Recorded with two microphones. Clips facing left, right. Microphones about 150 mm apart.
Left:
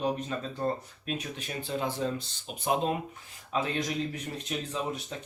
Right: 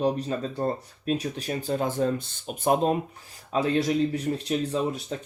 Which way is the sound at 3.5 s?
35° right (ahead or behind).